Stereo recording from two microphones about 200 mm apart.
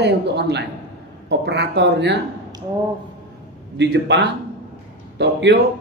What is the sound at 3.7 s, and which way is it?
Speech, 60° right (ahead or behind).